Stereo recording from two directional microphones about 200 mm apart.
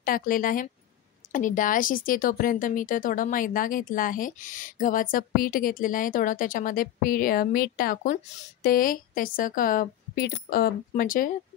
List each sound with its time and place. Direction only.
0.0 s speech: 45° left (ahead or behind)